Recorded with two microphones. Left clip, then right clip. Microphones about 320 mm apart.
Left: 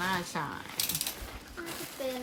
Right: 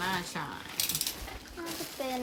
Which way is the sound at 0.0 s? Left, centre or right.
Centre.